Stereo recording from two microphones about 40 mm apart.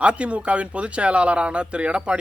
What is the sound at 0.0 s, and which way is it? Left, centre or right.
A man's voice, right.